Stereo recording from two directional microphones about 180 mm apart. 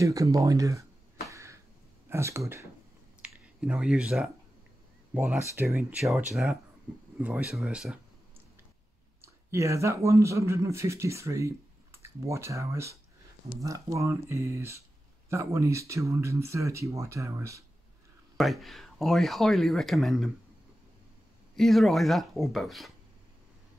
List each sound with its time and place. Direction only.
0.0 s speech: 20° right (ahead or behind)
1.3 s a sound: 15° right (ahead or behind)
2.0 s speech: 15° right (ahead or behind)
3.2 s a sound: 5° right (ahead or behind)
5.1 s speech: 5° right (ahead or behind)
9.2 s speech: 15° right (ahead or behind)
18.4 s speech: centre (ahead or behind)
21.5 s speech: centre (ahead or behind)